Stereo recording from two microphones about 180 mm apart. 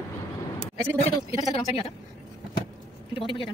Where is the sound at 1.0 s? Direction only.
35° left (ahead or behind).